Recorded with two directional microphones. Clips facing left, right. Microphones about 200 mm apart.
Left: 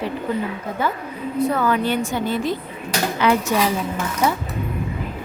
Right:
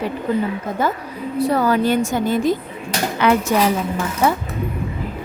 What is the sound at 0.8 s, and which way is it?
A woman's voice, 40° right (ahead or behind).